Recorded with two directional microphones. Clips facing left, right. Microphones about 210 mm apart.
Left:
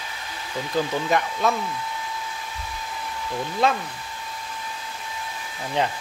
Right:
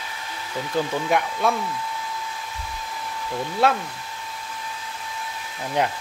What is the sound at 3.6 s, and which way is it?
Speech, 10° right (ahead or behind).